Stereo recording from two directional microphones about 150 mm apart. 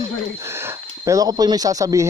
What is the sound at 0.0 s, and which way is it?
Speech, 15° right (ahead or behind).